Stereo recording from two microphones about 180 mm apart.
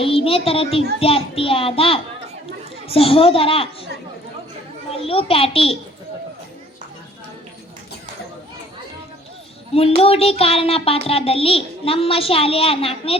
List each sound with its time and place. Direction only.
0.0 s a child's voice: 30° left (ahead or behind)
4.9 s a child's voice: 30° left (ahead or behind)
10.0 s a child's voice: 35° left (ahead or behind)